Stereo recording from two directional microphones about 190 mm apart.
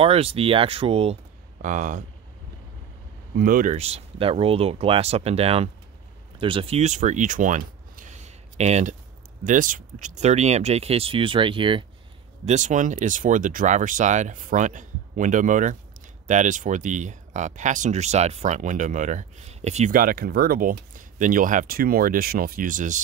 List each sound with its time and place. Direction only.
0.0 s speech: 30° right (ahead or behind)
1.6 s speech: 45° right (ahead or behind)
3.3 s speech: 45° right (ahead or behind); by 11.8 s 25° right (ahead or behind)
12.4 s speech: 40° right (ahead or behind)